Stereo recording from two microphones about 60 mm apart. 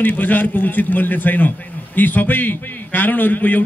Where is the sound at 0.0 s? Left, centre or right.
Left.